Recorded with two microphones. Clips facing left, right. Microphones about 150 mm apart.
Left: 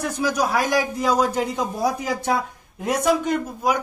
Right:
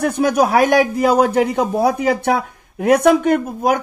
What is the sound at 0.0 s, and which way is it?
A man's voice, 55° right (ahead or behind).